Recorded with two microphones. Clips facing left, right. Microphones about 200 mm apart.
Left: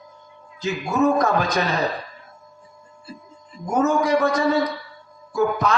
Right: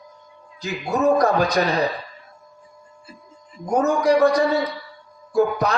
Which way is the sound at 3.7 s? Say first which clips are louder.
Right 1 dB; 35° right (ahead or behind).